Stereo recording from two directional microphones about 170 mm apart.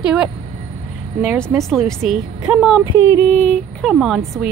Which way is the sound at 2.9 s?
15° right (ahead or behind).